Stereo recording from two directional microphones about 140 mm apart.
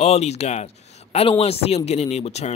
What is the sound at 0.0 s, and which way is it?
Speech, 50° left (ahead or behind).